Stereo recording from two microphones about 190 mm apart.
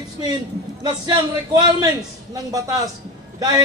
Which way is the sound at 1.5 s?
20° right (ahead or behind).